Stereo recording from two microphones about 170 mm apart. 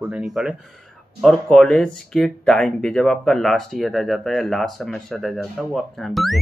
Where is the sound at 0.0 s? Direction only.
5° right (ahead or behind).